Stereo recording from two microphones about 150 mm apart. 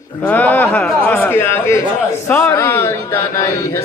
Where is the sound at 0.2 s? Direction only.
10° left (ahead or behind).